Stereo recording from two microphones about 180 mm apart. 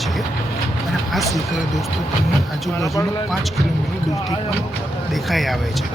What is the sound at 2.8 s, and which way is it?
Speech, 15° left (ahead or behind).